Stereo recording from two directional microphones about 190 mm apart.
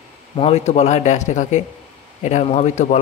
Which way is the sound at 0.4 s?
35° left (ahead or behind).